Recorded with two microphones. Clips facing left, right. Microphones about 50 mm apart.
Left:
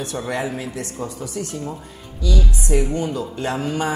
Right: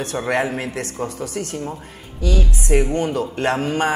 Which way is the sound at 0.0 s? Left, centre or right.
Right.